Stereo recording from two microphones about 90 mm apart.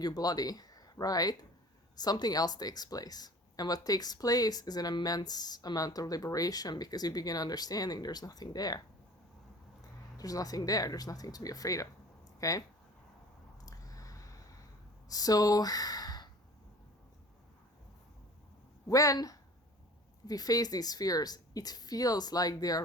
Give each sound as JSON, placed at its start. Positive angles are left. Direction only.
{"t": 0.0, "sound": "speech", "side_deg": 45}
{"t": 10.2, "sound": "speech", "side_deg": 40}
{"t": 13.7, "sound": "a sound", "side_deg": 40}
{"t": 15.1, "sound": "speech", "side_deg": 45}
{"t": 18.9, "sound": "speech", "side_deg": 40}